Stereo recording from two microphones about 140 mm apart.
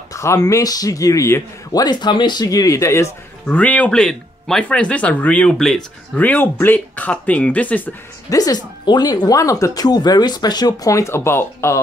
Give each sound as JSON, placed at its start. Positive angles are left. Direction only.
{"t": 0.1, "sound": "a man's voice", "side_deg": 20}
{"t": 8.3, "sound": "speech", "side_deg": 25}